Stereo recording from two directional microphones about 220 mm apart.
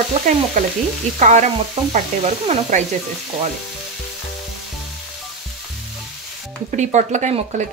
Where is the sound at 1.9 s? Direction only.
30° right (ahead or behind).